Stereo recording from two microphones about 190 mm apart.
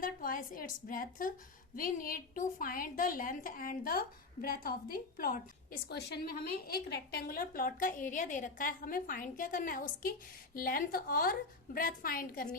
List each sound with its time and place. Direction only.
0.0 s a woman's voice: 45° left (ahead or behind)